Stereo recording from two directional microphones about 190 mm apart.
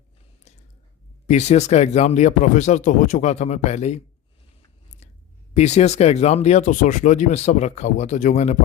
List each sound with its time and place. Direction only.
1.3 s speech: 35° left (ahead or behind)
5.0 s a sound: 35° left (ahead or behind)
5.5 s speech: 35° left (ahead or behind)